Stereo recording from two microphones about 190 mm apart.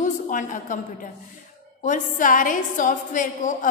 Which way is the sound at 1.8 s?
45° left (ahead or behind).